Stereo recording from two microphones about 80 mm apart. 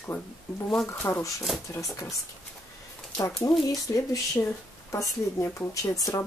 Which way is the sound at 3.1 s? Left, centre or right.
Left.